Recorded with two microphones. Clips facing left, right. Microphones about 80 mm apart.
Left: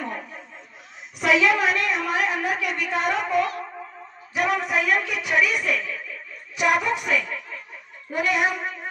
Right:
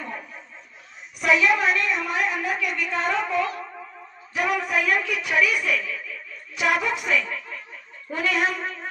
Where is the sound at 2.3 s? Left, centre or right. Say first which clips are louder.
Left 1 dB; left.